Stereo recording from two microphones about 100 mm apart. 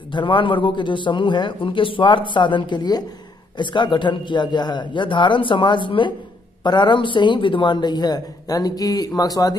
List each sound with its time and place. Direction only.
0.1 s speech: 55° left (ahead or behind)